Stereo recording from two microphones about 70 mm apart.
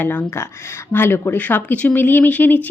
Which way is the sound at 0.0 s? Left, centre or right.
Left.